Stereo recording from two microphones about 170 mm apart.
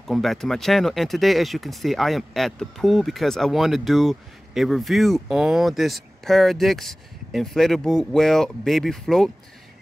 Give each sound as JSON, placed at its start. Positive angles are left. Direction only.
{"t": 0.0, "sound": "speech", "side_deg": 0}